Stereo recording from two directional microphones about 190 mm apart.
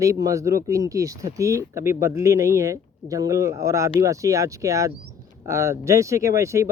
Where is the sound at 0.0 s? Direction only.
20° right (ahead or behind).